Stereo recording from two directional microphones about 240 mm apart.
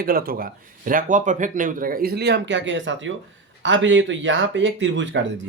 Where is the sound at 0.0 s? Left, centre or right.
Right.